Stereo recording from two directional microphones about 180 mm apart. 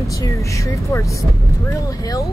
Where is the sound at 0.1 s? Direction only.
15° left (ahead or behind).